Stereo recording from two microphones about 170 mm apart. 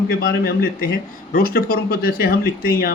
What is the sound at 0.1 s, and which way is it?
Speech, 60° left (ahead or behind).